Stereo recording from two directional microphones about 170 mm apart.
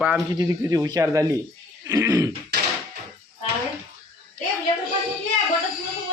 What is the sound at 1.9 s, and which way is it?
Throat clearing, 20° right (ahead or behind).